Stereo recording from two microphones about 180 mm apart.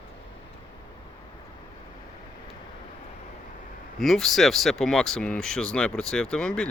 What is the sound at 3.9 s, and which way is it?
Speech, centre (ahead or behind).